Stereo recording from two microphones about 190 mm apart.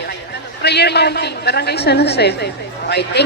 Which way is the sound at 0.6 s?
60° left (ahead or behind).